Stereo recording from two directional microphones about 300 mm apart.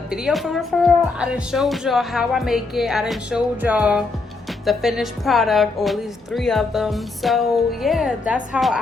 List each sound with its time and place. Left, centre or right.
0.1 s a woman's voice: centre